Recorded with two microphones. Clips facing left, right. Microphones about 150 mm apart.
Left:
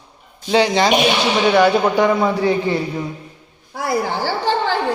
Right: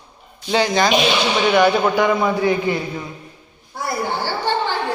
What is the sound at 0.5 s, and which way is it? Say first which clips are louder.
Speech: left 2 dB; 30° left (ahead or behind).